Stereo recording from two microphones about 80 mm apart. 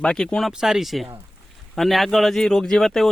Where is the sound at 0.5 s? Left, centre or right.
Centre.